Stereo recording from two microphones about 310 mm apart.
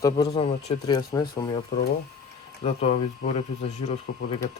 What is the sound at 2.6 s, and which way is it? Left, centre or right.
Speech, left.